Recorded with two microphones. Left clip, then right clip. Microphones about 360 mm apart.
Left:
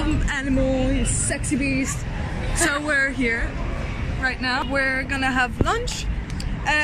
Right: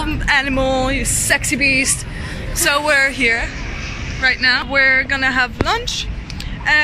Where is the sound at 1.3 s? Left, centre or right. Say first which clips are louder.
Right 11 dB; right.